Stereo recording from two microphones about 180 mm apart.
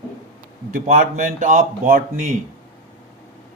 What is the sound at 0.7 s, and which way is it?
Speech, 50° right (ahead or behind).